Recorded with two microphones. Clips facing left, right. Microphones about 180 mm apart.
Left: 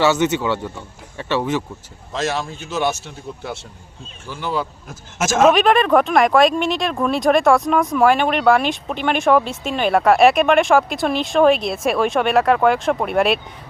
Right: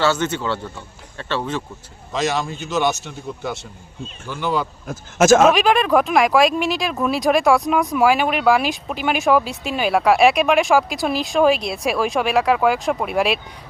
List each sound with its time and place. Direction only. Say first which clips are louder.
0.0 s speech: left 3 dB; 15° left (ahead or behind)
2.1 s speech: right 1 dB; 5° left (ahead or behind)
4.3 s speech: right 1 dB; 5° left (ahead or behind)
4.9 s speech: right 7 dB; 55° right (ahead or behind)
5.5 s speech: left 2 dB; centre (ahead or behind)